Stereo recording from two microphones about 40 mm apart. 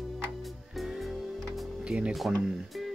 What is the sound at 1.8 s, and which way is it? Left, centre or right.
Speech, right.